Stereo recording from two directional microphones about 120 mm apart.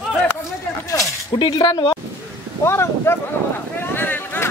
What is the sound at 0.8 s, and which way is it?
Speech, 30° left (ahead or behind).